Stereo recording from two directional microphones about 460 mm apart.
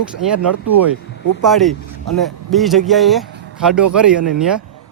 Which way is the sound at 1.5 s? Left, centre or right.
Centre.